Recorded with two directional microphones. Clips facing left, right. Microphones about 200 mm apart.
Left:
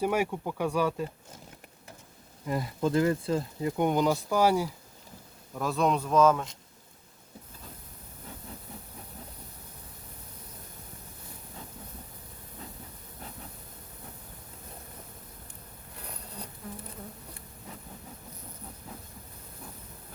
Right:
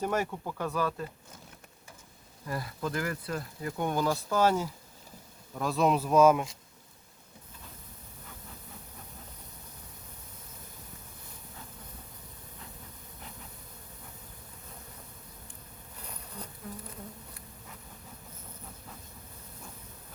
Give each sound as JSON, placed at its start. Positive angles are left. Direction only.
{"t": 0.0, "sound": "speech", "side_deg": 10}
{"t": 2.5, "sound": "speech", "side_deg": 20}
{"t": 5.5, "sound": "speech", "side_deg": 0}